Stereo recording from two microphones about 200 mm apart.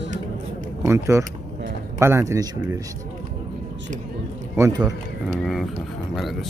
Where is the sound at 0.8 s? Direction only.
15° right (ahead or behind).